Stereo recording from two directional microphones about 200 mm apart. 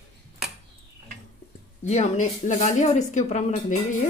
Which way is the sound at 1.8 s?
35° left (ahead or behind).